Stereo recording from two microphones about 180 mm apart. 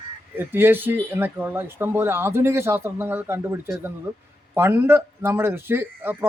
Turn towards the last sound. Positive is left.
turn(degrees=-10)  # may be behind; listen again after turning